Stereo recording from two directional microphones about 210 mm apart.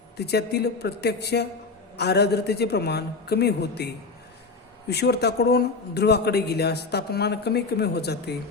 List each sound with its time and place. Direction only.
0.2 s speech: 50° left (ahead or behind)